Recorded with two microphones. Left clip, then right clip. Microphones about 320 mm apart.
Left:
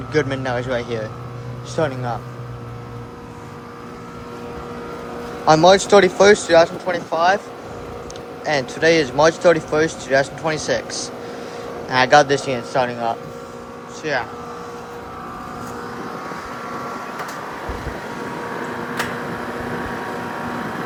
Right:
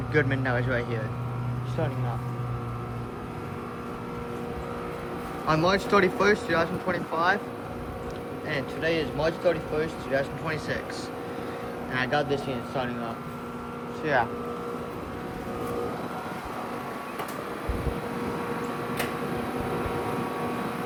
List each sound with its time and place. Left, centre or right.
0.1 s speech: centre
5.5 s speech: centre
8.4 s a man's voice: centre
11.9 s speech: centre
14.0 s speech: centre